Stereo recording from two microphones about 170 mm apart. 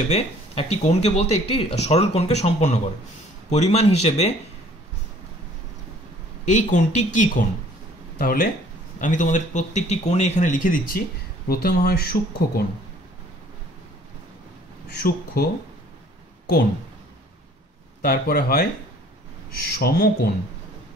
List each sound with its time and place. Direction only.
0.1 s speech: 40° left (ahead or behind)
6.4 s speech: 45° left (ahead or behind)
8.2 s speech: 55° left (ahead or behind)
11.4 s speech: 65° left (ahead or behind)
15.0 s speech: 65° left (ahead or behind)
18.0 s speech: 60° left (ahead or behind)
19.8 s speech: 65° left (ahead or behind)